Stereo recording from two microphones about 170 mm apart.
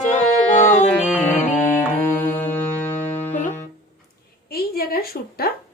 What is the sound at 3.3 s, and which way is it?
Music, 50° left (ahead or behind).